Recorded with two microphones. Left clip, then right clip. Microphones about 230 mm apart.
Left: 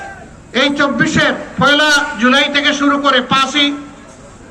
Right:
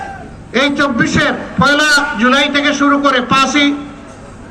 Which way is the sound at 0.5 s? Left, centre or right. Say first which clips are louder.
Even; right.